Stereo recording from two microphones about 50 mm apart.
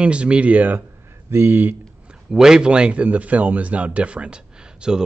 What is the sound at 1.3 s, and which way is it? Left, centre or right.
Speech, right.